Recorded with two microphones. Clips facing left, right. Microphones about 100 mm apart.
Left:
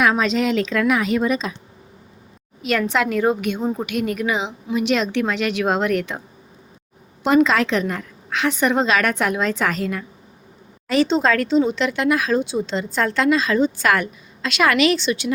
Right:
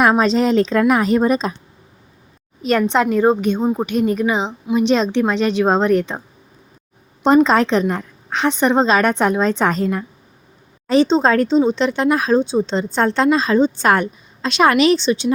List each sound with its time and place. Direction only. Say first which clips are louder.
0.0 s a woman's voice: right 4 dB; 35° right (ahead or behind)
2.6 s a woman's voice: right 4 dB; 35° right (ahead or behind)
7.4 s a woman's voice: right 4 dB; 35° right (ahead or behind)
15.0 s a woman's voice: right 4 dB; 20° right (ahead or behind)